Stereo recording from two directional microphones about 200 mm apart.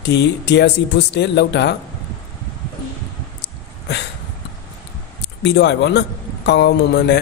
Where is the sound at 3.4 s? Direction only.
60° left (ahead or behind).